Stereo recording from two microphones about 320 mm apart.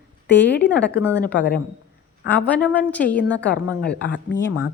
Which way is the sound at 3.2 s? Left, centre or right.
Left.